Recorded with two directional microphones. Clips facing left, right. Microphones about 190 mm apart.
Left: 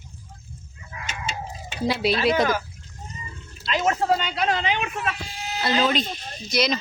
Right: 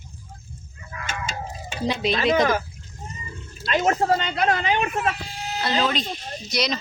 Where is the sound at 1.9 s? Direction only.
5° left (ahead or behind).